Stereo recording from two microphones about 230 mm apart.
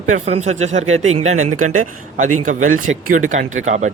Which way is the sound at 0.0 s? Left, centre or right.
Right.